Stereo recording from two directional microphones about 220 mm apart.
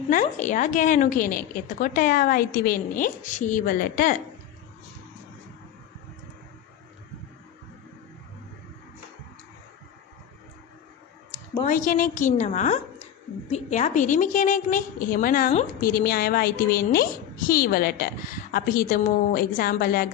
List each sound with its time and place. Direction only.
0.1 s a woman's voice: 35° left (ahead or behind)
11.6 s a woman's voice: 35° left (ahead or behind)